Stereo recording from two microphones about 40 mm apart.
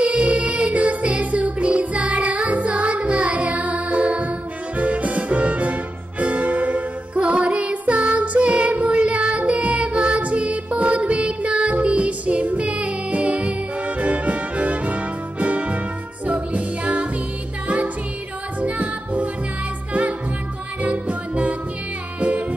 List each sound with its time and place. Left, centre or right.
0.0 s music: right
18.6 s music: right